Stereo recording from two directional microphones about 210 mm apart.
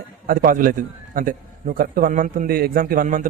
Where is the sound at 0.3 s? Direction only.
40° right (ahead or behind).